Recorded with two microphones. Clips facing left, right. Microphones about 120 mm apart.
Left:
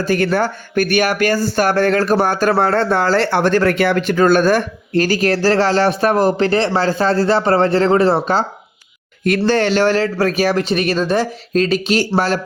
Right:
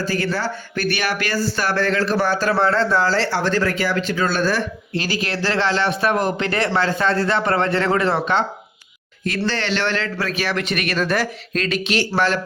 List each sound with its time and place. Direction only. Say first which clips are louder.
0.0 s speech: left 6 dB; 60° left (ahead or behind); by 11.3 s 25° left (ahead or behind)
11.5 s speech: left 6 dB; 40° left (ahead or behind)